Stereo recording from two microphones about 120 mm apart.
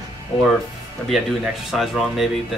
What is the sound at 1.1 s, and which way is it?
Speech, centre (ahead or behind).